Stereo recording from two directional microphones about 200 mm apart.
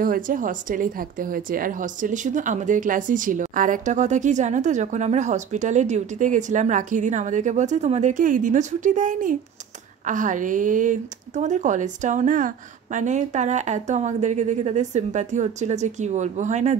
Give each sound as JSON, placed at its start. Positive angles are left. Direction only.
{"t": 0.0, "sound": "speech", "side_deg": -45}